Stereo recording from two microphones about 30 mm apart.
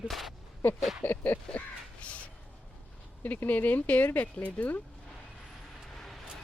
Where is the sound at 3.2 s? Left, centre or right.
Left.